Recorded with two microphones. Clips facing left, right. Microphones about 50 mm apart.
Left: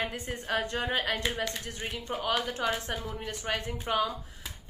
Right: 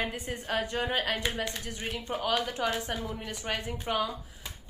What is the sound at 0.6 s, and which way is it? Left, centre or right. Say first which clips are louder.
Speech: right 1 dB; left.